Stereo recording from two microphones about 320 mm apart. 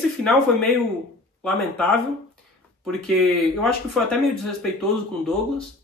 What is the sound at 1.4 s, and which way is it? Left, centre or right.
Speech, centre.